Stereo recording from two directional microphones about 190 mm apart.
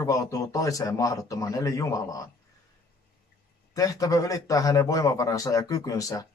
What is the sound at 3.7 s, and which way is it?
A man's voice, 20° left (ahead or behind).